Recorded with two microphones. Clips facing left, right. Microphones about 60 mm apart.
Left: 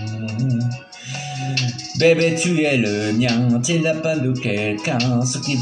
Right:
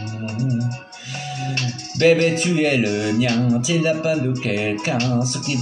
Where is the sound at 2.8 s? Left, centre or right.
Centre.